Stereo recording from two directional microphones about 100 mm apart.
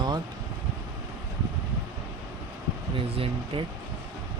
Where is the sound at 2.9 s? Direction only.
65° right (ahead or behind).